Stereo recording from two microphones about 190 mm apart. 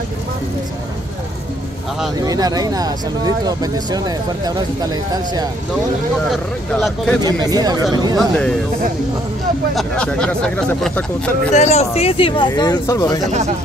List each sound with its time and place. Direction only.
2.1 s speech: 20° right (ahead or behind)
6.3 s speech: centre (ahead or behind)
7.2 s speech: 20° right (ahead or behind)
8.2 s speech: 5° left (ahead or behind)
9.8 s speech: 5° left (ahead or behind)
11.5 s speech: 35° left (ahead or behind); by 13.2 s 20° left (ahead or behind)
13.3 s speech: 35° right (ahead or behind)